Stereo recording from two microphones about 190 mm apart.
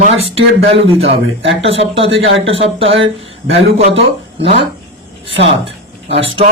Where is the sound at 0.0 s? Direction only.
30° right (ahead or behind).